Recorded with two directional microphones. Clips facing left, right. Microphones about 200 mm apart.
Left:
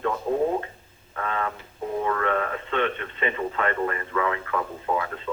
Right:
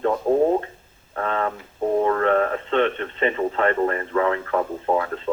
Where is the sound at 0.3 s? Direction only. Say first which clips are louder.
Right 6 dB; 40° right (ahead or behind).